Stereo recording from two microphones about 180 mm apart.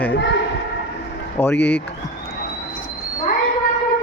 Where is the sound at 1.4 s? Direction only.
10° left (ahead or behind).